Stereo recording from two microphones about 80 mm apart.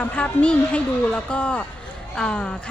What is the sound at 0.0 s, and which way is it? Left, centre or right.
A woman's voice, centre.